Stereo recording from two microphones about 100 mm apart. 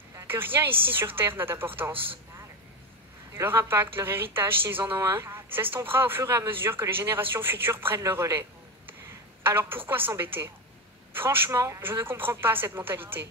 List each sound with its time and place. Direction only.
0.3 s speech: 20° right (ahead or behind)
3.3 s speech: 25° right (ahead or behind)